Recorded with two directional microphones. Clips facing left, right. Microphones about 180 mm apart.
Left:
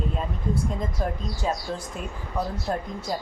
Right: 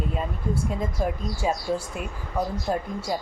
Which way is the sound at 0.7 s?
5° right (ahead or behind).